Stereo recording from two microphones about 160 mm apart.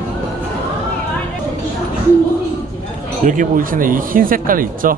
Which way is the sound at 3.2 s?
60° right (ahead or behind).